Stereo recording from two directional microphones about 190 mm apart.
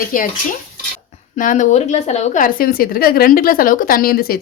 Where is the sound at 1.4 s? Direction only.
40° left (ahead or behind).